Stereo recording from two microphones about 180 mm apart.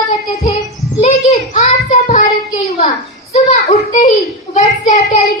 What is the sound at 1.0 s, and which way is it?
A child's voice, 40° left (ahead or behind).